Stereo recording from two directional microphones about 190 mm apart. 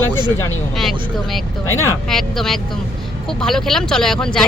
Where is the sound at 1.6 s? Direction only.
15° left (ahead or behind).